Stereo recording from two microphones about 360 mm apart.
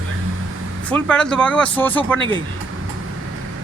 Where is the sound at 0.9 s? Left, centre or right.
Centre.